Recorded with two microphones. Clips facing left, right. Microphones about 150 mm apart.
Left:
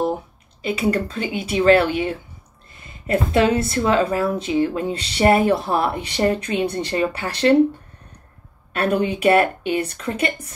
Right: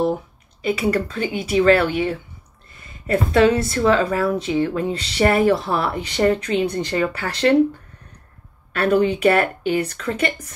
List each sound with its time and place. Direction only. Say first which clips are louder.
0.6 s speech: right 1 dB; 25° left (ahead or behind)
8.7 s speech: right 3 dB; 25° left (ahead or behind)